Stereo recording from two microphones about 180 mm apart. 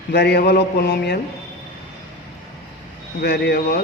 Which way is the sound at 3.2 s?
65° left (ahead or behind).